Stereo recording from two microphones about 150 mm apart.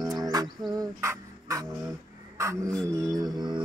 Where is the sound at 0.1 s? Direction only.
25° right (ahead or behind).